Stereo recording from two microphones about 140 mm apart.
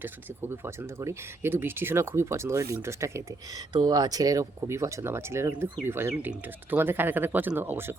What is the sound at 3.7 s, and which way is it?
Speech, 30° right (ahead or behind).